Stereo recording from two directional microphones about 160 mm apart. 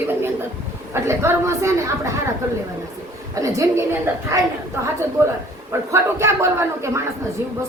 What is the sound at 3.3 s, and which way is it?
A woman's voice, 20° right (ahead or behind).